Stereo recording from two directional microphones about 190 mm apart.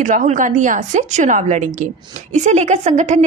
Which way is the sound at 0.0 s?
40° right (ahead or behind).